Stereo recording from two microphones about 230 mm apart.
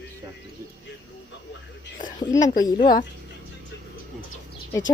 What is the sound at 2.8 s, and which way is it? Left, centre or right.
Speech, left.